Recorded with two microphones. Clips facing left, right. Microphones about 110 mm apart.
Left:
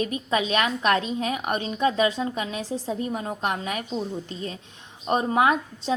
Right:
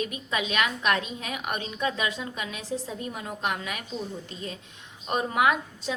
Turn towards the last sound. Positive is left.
turn(degrees=30)  # may be behind; listen again after turning